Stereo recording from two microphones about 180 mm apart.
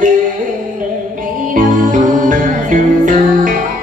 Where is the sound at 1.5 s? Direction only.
45° right (ahead or behind).